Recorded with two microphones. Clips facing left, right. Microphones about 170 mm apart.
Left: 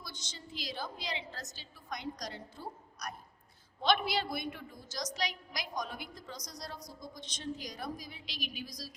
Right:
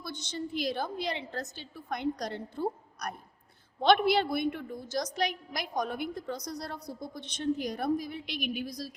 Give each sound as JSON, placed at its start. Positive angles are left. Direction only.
{"t": 0.0, "sound": "a woman's voice", "side_deg": -60}